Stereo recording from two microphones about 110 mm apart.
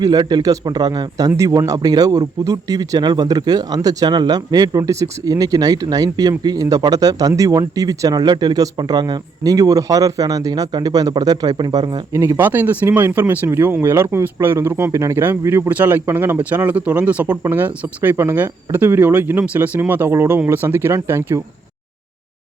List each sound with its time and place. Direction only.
0.0 s speech: 35° right (ahead or behind)
12.1 s speech: 25° right (ahead or behind)